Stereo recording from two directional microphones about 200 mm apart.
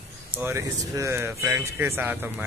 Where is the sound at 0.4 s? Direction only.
15° right (ahead or behind).